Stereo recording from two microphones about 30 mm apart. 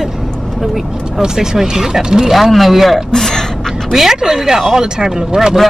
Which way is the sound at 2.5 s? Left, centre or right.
Centre.